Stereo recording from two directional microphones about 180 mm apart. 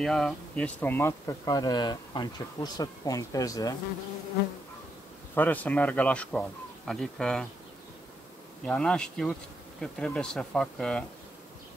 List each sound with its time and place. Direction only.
0.0 s speech: 5° left (ahead or behind); by 3.7 s 20° left (ahead or behind)
5.3 s speech: 10° left (ahead or behind)
6.9 s bee: 5° left (ahead or behind)
8.6 s bee: 5° left (ahead or behind)